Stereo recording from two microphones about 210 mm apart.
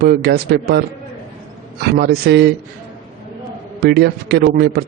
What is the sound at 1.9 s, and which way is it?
Speech, 50° right (ahead or behind).